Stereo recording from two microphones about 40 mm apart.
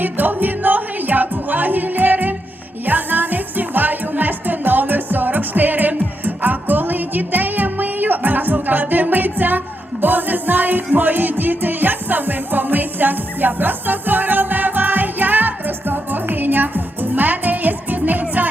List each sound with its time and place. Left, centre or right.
0.0 s music: right